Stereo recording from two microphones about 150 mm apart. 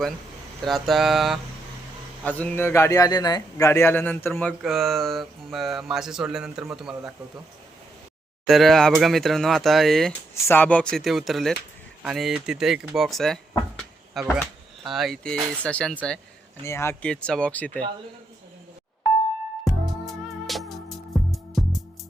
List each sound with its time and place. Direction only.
0.6 s speech: centre (ahead or behind)
2.2 s a man's voice: 15° left (ahead or behind)
3.7 s speech: 15° left (ahead or behind)
4.6 s speech: centre (ahead or behind)
8.4 s speech: centre (ahead or behind)
10.3 s speech: 15° left (ahead or behind)
16.6 s speech: 15° left (ahead or behind)
19.7 s music: centre (ahead or behind)